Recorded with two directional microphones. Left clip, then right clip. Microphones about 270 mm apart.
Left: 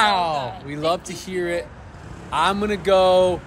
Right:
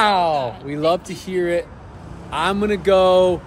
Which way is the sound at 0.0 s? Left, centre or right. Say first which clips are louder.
Right 2 dB; centre.